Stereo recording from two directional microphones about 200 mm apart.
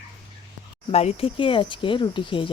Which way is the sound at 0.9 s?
30° left (ahead or behind).